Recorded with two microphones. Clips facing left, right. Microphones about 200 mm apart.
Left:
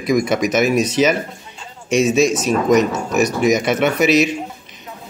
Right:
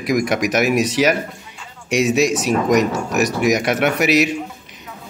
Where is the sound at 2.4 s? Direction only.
15° right (ahead or behind).